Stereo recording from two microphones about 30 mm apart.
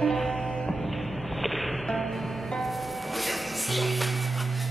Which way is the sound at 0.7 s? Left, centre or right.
Centre.